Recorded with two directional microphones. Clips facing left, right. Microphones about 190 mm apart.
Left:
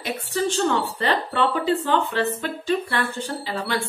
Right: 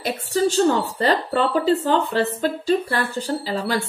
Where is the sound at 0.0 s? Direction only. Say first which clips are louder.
Right 4 dB; 35° right (ahead or behind).